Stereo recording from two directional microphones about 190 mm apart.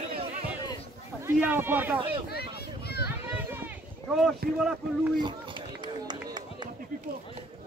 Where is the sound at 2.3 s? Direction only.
55° left (ahead or behind).